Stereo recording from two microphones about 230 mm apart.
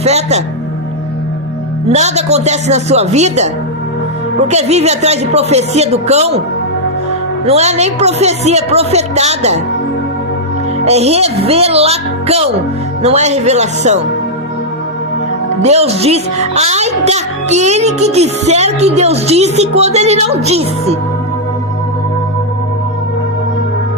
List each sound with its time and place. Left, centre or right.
0.0 s a man's voice: right
1.9 s a child's voice: right
7.4 s a child's voice: right
10.8 s a child's voice: right
15.6 s a child's voice: right